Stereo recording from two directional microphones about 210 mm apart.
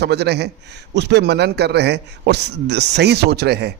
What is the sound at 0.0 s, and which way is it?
A man's voice, 55° right (ahead or behind).